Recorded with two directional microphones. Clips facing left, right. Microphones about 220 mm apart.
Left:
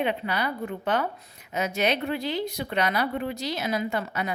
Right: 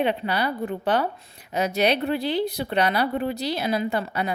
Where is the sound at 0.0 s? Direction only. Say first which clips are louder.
Right 3 dB; 30° right (ahead or behind).